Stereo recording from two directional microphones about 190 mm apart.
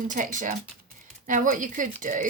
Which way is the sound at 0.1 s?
45° right (ahead or behind).